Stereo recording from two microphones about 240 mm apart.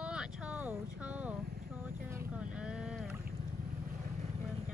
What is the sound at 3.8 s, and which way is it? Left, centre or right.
Vehicle, right.